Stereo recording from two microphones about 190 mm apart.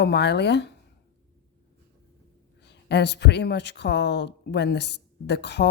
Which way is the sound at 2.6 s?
60° left (ahead or behind).